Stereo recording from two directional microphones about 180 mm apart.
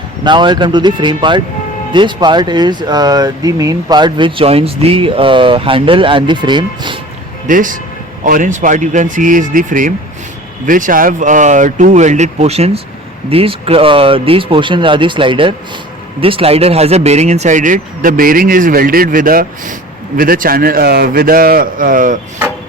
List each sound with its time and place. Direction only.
0.3 s speech: 25° right (ahead or behind)
7.4 s speech: 45° right (ahead or behind)